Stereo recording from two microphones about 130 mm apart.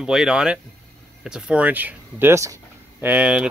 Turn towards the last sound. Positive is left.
turn(degrees=-10)  # may be behind; listen again after turning